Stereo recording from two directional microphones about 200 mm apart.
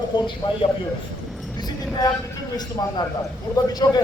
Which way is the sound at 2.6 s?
20° left (ahead or behind).